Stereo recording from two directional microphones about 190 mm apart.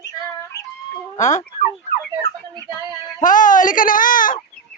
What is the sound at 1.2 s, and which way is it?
Speech, 40° left (ahead or behind).